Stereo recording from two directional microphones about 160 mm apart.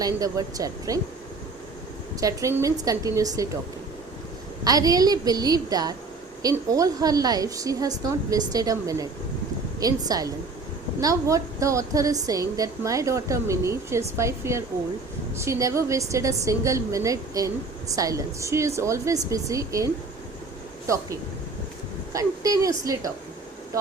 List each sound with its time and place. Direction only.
0.0 s a woman's voice: 20° right (ahead or behind)
2.2 s a woman's voice: 20° right (ahead or behind)
4.6 s a woman's voice: 25° right (ahead or behind)